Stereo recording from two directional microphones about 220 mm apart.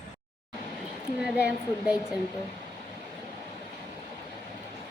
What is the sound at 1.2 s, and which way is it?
Speech, 5° right (ahead or behind).